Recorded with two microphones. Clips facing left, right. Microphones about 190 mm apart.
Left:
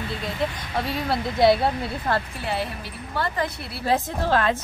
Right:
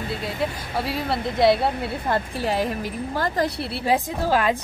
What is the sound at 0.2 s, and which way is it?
Speech, 5° right (ahead or behind).